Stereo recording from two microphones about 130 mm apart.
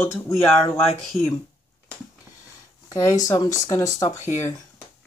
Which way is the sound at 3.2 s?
25° left (ahead or behind).